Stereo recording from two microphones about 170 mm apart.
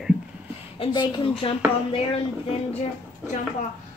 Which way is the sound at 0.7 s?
30° left (ahead or behind).